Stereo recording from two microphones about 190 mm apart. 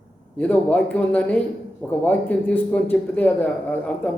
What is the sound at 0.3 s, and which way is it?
A man's voice, 5° left (ahead or behind).